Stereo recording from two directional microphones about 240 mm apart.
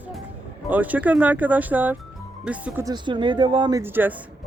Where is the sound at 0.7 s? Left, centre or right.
Centre.